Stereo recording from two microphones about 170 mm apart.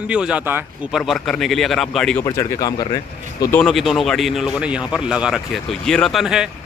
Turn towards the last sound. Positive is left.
turn(degrees=-5)  # may be behind; listen again after turning